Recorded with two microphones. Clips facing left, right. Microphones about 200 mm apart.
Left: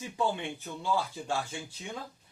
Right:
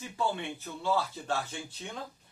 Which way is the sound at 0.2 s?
15° left (ahead or behind).